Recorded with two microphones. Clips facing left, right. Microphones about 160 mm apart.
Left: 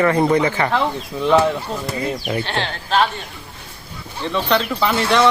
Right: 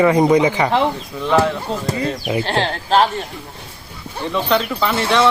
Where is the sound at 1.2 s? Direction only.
15° left (ahead or behind).